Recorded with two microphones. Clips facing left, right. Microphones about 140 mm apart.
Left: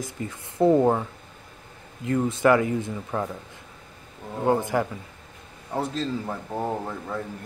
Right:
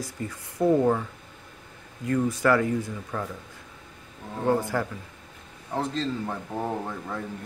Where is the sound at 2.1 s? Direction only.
25° left (ahead or behind).